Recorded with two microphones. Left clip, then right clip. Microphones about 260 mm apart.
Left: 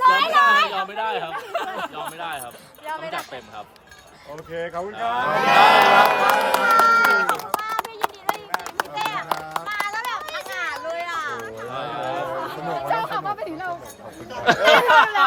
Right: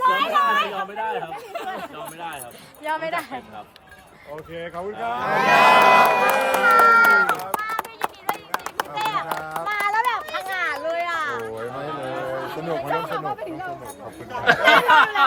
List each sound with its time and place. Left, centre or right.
0.0 s chatter: centre
1.8 s speech: centre
2.8 s speech: right
4.5 s speech: left
5.4 s crowd: centre
6.7 s a sound: centre
8.8 s clip-clop: centre
9.6 s run: right
12.9 s a sound: centre
14.4 s speech: centre